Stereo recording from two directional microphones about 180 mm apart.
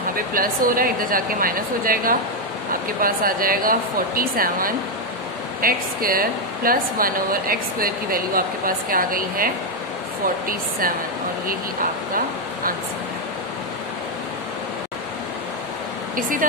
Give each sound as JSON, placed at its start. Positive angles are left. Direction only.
{"t": 0.3, "sound": "speech", "side_deg": -50}
{"t": 16.2, "sound": "speech", "side_deg": -50}